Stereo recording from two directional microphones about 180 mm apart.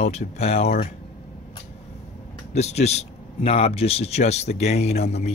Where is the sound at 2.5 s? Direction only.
35° left (ahead or behind).